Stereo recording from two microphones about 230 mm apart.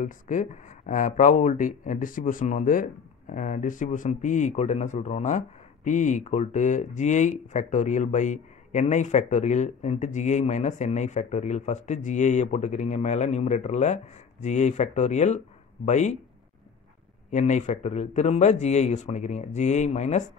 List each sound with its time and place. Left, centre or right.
0.0 s speech: left
17.3 s speech: left